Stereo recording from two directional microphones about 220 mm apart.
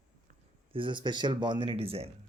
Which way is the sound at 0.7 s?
20° right (ahead or behind).